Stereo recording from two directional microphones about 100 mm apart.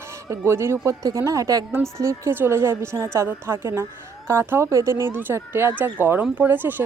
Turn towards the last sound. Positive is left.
turn(degrees=-20)  # may be behind; listen again after turning